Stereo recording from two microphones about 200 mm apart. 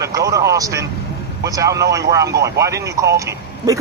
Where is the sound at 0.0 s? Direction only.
15° right (ahead or behind).